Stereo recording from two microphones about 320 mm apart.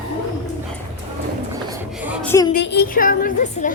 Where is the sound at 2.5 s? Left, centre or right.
Left.